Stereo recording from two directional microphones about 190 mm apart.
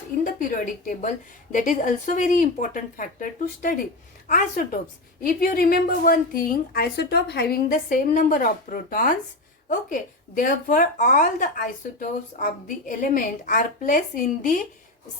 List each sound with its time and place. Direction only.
0.3 s a woman's voice: 45° left (ahead or behind)